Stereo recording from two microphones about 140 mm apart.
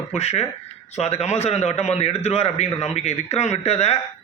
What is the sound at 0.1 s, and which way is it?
A man's voice, 50° left (ahead or behind).